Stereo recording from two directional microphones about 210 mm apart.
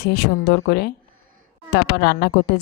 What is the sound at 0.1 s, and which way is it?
Speech, 50° left (ahead or behind).